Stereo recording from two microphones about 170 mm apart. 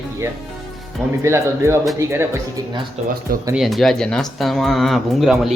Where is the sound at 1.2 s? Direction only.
15° right (ahead or behind).